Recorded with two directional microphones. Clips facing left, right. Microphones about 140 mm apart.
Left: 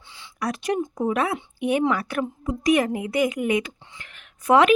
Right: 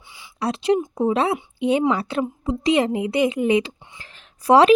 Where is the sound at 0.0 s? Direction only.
10° right (ahead or behind).